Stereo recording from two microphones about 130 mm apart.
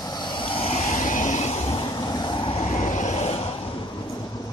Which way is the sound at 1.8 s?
30° left (ahead or behind).